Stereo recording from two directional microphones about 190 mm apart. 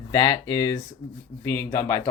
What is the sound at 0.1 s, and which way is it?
Speech, 20° left (ahead or behind).